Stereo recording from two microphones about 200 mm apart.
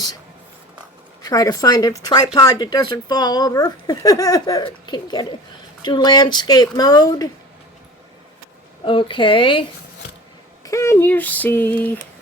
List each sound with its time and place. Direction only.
1.2 s speech: 20° left (ahead or behind)
8.8 s speech: 25° left (ahead or behind)
10.6 s a sound: 15° left (ahead or behind)